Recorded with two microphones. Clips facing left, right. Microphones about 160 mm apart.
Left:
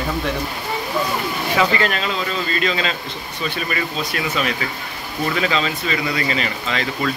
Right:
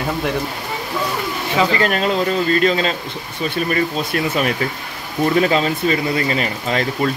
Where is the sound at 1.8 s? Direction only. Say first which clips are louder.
Right 5 dB; 50° right (ahead or behind).